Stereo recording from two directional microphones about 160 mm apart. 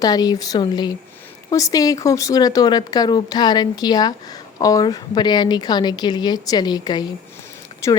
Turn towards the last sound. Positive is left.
turn(degrees=20)  # may be behind; listen again after turning